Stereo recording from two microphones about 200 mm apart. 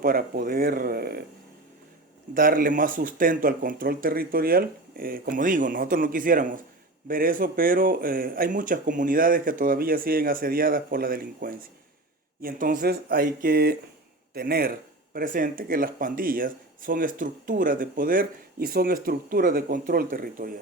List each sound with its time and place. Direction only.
0.0 s speech: 45° right (ahead or behind)
2.3 s speech: 45° right (ahead or behind)